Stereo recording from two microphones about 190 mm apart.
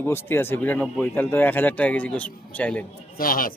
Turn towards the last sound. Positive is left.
turn(degrees=50)  # may be behind; listen again after turning